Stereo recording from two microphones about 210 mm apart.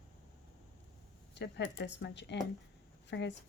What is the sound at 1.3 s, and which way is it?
Speech, 55° left (ahead or behind).